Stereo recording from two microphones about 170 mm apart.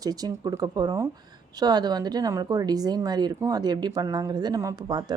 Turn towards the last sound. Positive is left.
turn(degrees=-25)  # may be behind; listen again after turning